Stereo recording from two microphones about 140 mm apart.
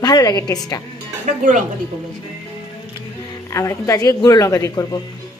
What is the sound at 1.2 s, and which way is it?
Speech, 65° right (ahead or behind).